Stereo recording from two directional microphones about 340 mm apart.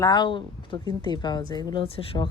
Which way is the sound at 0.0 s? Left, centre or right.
Centre.